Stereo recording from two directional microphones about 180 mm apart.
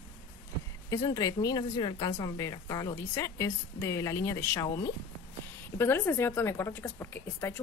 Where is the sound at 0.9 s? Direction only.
15° left (ahead or behind).